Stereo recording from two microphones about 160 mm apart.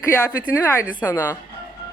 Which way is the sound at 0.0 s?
15° left (ahead or behind).